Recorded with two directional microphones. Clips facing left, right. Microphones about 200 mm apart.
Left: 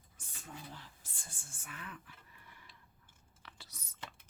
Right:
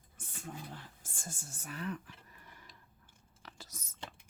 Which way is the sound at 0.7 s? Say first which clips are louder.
Right 4 dB; 50° right (ahead or behind).